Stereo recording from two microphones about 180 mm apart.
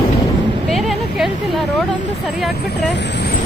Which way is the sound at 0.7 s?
Centre (ahead or behind).